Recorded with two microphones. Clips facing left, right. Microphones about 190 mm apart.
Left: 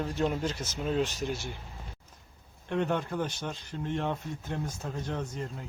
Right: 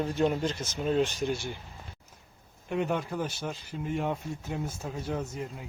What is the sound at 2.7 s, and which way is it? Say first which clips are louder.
Speech: even; 5° right (ahead or behind).